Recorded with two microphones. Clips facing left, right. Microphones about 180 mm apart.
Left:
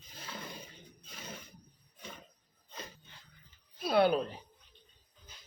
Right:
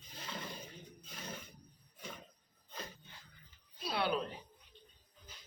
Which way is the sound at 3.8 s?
50° left (ahead or behind).